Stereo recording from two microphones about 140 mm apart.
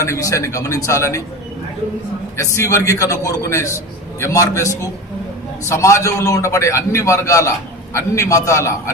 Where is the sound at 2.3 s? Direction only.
20° left (ahead or behind).